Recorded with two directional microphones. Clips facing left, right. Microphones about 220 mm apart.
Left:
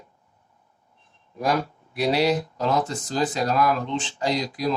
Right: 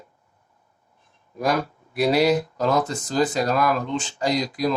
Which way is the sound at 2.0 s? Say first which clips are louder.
Right 3 dB; 45° right (ahead or behind).